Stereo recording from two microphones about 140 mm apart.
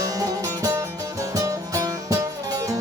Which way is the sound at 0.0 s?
25° right (ahead or behind).